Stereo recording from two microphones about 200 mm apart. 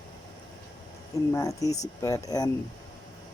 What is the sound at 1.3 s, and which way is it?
Speech, 15° left (ahead or behind).